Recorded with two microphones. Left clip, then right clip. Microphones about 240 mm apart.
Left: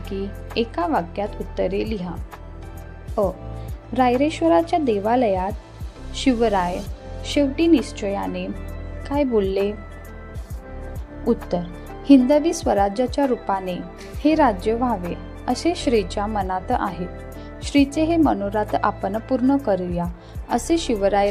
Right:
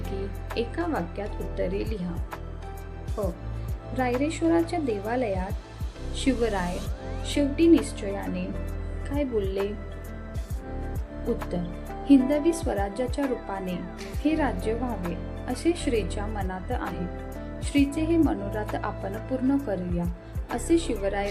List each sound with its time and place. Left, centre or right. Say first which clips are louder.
0.5 s speech: left 7 dB; left
3.9 s speech: left 8 dB; left
11.5 s speech: left 6 dB; left